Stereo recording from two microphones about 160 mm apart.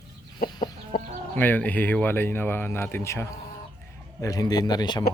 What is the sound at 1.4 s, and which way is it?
Speech, 10° left (ahead or behind).